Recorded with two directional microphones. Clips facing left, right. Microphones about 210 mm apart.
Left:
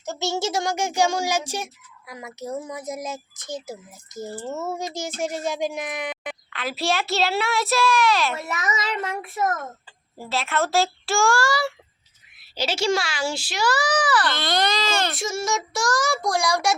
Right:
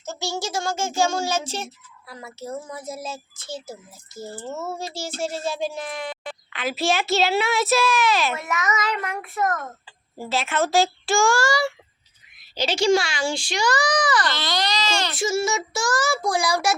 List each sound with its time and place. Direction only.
0.0 s child singing: 20° left (ahead or behind)
6.5 s a woman's voice: centre (ahead or behind)
8.4 s child singing: 30° left (ahead or behind)
10.2 s a woman's voice: centre (ahead or behind)
14.3 s speech: 55° left (ahead or behind)
15.1 s a woman's voice: centre (ahead or behind)